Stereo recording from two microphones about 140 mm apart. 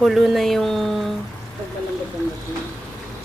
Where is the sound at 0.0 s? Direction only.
Centre (ahead or behind).